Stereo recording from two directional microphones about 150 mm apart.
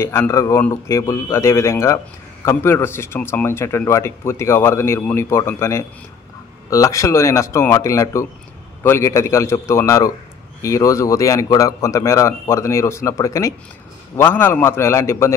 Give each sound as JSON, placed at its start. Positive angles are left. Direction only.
{"t": 0.0, "sound": "a man's voice", "side_deg": 15}